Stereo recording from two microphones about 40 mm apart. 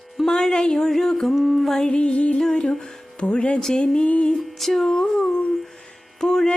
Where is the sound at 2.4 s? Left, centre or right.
Centre.